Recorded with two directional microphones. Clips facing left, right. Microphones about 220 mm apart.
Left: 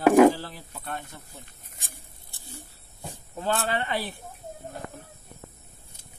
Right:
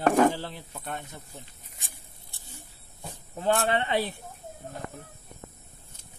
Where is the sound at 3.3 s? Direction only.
15° right (ahead or behind).